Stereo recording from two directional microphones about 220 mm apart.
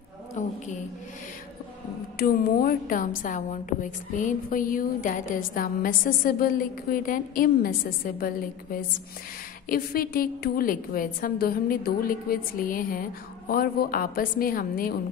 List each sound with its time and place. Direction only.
0.4 s a sound: 35° left (ahead or behind)
2.1 s a woman's voice: 40° left (ahead or behind)
9.7 s a woman's voice: 40° left (ahead or behind)